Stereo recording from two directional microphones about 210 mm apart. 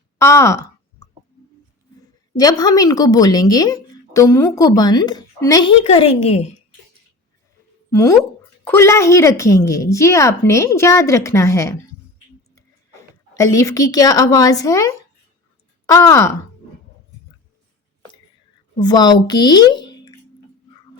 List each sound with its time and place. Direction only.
0.2 s a sound: 15° left (ahead or behind)
2.0 s a woman's voice: 20° left (ahead or behind)
5.8 s a woman's voice: 30° left (ahead or behind)
7.9 s a woman's voice: 15° left (ahead or behind)
13.3 s a woman's voice: 15° left (ahead or behind)
18.8 s speech: 20° left (ahead or behind)